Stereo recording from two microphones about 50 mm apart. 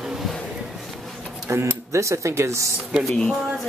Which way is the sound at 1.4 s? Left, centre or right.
Right.